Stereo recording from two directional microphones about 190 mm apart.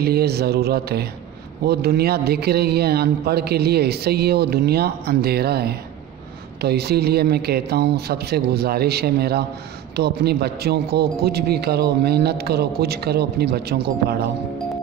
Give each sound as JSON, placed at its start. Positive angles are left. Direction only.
{"t": 0.0, "sound": "a man's voice", "side_deg": -55}